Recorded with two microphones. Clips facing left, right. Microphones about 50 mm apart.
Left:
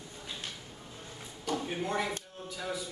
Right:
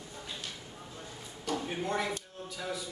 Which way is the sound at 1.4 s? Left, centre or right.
Centre.